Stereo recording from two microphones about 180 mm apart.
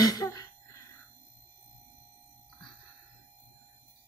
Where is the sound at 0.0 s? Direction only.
20° left (ahead or behind).